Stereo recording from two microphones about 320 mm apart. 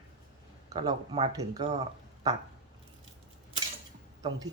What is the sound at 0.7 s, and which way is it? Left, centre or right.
Speech, centre.